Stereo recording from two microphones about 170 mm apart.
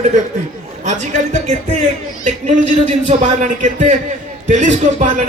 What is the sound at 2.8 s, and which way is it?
A man's voice, 45° right (ahead or behind).